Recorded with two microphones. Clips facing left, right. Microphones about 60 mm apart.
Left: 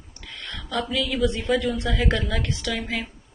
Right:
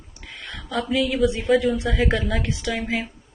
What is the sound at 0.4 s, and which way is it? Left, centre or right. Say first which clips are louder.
Speech: right 1 dB; centre.